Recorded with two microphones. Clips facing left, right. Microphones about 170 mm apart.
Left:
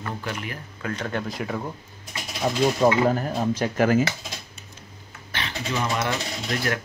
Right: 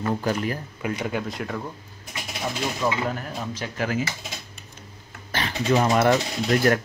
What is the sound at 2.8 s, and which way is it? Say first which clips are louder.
Speech: left 6 dB; 45° left (ahead or behind).